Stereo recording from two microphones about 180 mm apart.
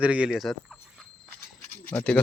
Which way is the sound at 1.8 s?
10° left (ahead or behind).